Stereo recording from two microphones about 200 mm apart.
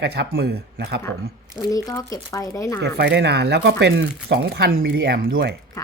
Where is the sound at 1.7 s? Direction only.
15° left (ahead or behind).